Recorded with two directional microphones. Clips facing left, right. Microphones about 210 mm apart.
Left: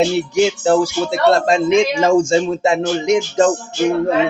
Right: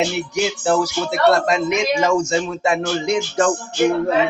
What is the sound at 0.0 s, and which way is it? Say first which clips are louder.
Speech: left 6 dB; 30° left (ahead or behind).